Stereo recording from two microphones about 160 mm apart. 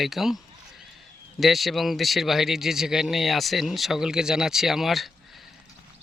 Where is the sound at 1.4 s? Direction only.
Centre (ahead or behind).